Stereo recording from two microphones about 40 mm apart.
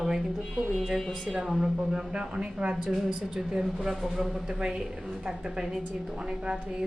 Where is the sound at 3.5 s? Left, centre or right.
Centre.